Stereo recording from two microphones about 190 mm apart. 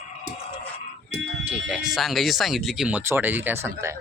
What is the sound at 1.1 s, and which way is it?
Fire alarm, 80° right.